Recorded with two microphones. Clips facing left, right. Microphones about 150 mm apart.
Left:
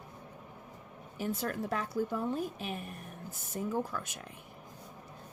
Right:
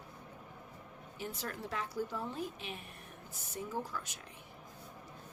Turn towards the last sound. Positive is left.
turn(degrees=50)  # may be behind; listen again after turning